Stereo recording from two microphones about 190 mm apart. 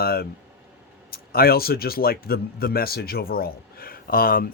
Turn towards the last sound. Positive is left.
turn(degrees=50)  # may be behind; listen again after turning